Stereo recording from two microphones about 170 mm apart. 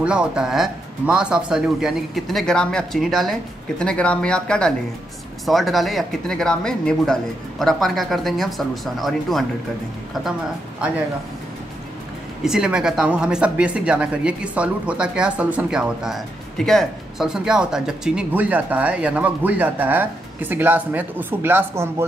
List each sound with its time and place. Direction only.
0.0 s speech: 5° right (ahead or behind)
12.4 s speech: 5° right (ahead or behind)